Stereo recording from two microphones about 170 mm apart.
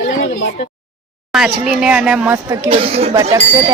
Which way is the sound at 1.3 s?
5° right (ahead or behind).